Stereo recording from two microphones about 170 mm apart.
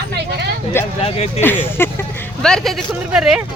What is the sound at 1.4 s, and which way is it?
Speech, 10° left (ahead or behind).